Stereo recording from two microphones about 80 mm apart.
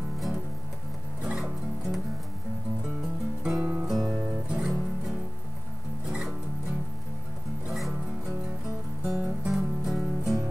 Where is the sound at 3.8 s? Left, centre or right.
Centre.